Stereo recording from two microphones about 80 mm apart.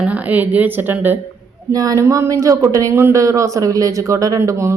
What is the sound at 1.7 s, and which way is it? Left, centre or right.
Speech, right.